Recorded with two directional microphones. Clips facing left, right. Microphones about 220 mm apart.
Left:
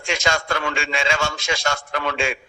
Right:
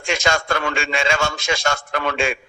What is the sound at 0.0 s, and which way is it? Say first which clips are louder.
A man's voice: right 2 dB; 50° right (ahead or behind).